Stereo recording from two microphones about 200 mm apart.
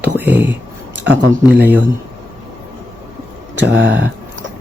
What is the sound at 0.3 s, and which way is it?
Speech, 10° right (ahead or behind).